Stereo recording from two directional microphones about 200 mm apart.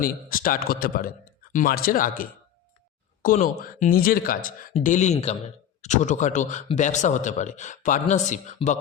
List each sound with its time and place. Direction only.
0.0 s speech: 45° left (ahead or behind)
3.2 s speech: 45° left (ahead or behind)